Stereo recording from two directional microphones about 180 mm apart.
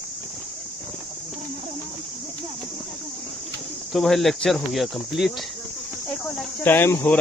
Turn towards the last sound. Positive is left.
turn(degrees=10)  # may be behind; listen again after turning